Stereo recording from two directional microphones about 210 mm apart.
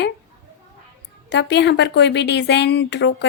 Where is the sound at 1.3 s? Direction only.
55° left (ahead or behind).